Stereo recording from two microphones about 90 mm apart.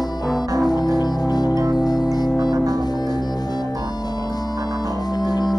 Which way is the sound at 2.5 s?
45° right (ahead or behind).